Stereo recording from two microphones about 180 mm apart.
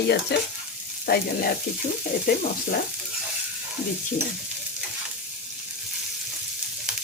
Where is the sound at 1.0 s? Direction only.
60° left (ahead or behind).